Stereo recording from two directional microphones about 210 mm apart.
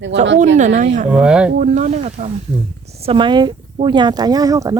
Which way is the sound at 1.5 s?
35° right (ahead or behind).